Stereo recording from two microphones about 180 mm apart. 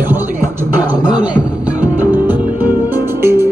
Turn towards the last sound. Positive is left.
turn(degrees=-15)  # may be behind; listen again after turning